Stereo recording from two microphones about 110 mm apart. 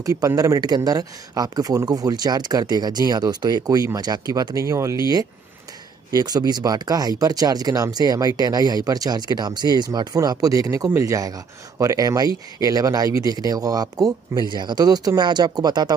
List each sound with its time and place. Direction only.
0.0 s speech: 30° right (ahead or behind)